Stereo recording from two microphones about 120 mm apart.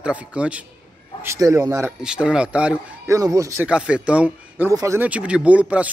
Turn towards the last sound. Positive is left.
turn(degrees=-10)  # may be behind; listen again after turning